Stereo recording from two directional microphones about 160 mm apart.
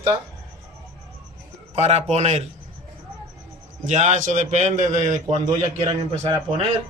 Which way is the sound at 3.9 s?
50° right (ahead or behind).